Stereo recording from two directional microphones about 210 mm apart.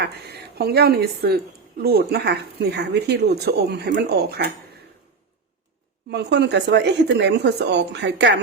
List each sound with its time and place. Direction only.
0.0 s speech: 50° right (ahead or behind)
6.1 s speech: 55° right (ahead or behind)